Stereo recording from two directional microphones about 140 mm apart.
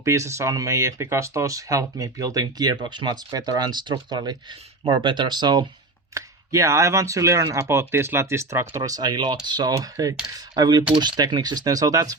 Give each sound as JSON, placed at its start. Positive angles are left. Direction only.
{"t": 0.0, "sound": "speech", "side_deg": -20}